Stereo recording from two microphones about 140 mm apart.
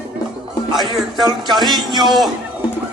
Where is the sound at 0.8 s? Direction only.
Centre (ahead or behind).